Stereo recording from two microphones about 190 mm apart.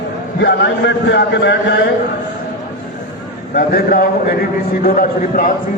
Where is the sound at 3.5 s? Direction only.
55° left (ahead or behind).